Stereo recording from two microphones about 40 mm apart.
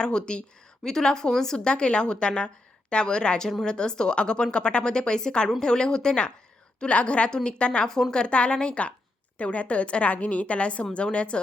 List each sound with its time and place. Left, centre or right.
0.0 s a woman's voice: left
1.5 s a woman's voice: left